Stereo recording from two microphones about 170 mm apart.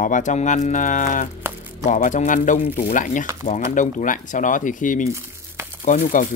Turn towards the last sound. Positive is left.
turn(degrees=45)  # may be behind; listen again after turning